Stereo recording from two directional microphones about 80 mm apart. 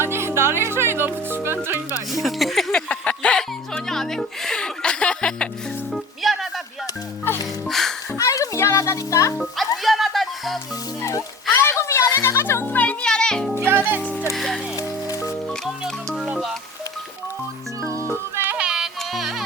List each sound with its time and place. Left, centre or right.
0.0 s music: right
2.1 s speech: centre
2.9 s music: centre
5.9 s music: centre
7.7 s music: centre
8.2 s music: left
9.4 s music: centre
11.5 s music: left; by 13.5 s centre
13.6 s music: right
14.3 s music: centre
14.8 s music: left
16.1 s music: centre
18.5 s music: centre